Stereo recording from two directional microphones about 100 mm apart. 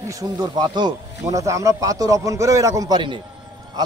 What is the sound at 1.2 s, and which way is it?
Speech, 30° right (ahead or behind).